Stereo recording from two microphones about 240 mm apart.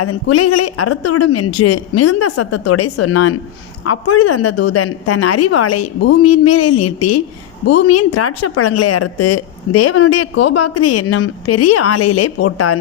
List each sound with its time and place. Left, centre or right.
0.0 s speech: left
6.2 s a woman's voice: left